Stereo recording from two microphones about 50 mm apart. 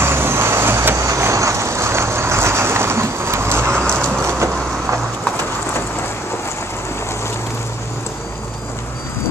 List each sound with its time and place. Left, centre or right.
0.0 s vehicle: right
0.9 s vehicle: right
3.8 s train: centre
4.2 s vehicle: right